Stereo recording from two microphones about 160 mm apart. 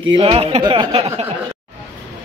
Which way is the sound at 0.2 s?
35° right (ahead or behind).